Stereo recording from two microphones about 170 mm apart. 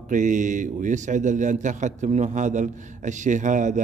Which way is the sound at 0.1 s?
50° right (ahead or behind).